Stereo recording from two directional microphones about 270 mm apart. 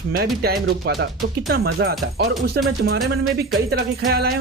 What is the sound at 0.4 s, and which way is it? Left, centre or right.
Speech, right.